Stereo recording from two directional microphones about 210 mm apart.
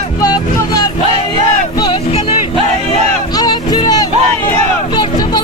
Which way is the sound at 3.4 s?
20° left (ahead or behind).